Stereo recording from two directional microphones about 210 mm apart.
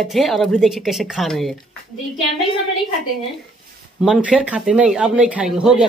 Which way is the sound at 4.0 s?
5° right (ahead or behind).